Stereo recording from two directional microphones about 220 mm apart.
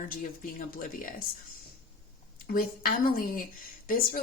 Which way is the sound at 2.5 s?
45° left (ahead or behind).